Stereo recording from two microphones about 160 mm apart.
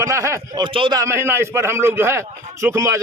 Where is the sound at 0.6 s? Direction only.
30° right (ahead or behind).